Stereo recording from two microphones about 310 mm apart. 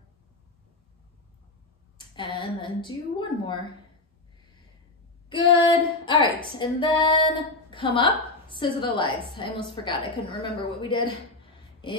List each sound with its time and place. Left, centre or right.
2.0 s female singing: centre
5.3 s female singing: centre
7.7 s a woman's voice: centre
9.3 s female singing: centre
9.8 s a woman's voice: centre
10.9 s female singing: centre